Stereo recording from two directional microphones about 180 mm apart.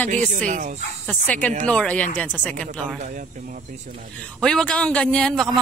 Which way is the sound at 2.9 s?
45° right (ahead or behind).